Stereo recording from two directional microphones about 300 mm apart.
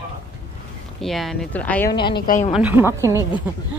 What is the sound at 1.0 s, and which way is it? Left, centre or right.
Speech, centre.